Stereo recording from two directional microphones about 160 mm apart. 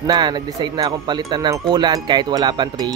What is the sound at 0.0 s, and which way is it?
Speech, 25° right (ahead or behind).